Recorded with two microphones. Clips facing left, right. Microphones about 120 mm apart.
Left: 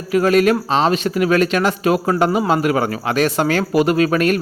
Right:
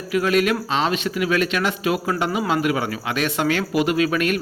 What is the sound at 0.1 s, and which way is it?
Speech, 40° left (ahead or behind).